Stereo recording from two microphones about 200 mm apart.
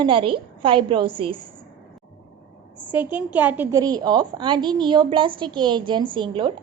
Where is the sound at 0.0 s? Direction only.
25° right (ahead or behind).